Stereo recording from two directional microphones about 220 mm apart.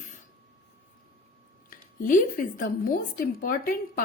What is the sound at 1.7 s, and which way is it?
A woman's voice, 40° left (ahead or behind).